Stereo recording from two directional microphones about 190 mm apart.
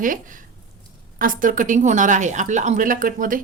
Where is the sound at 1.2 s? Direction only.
45° right (ahead or behind).